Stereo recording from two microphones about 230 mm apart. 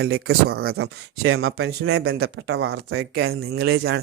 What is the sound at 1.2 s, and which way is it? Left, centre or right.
Speech, right.